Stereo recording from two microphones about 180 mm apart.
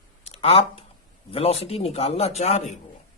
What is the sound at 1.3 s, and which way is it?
Speech, 35° left (ahead or behind).